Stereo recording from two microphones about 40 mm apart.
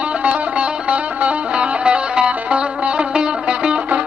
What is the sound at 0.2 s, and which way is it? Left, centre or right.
Music, right.